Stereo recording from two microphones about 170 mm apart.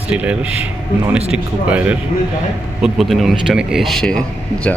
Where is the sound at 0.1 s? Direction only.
5° right (ahead or behind).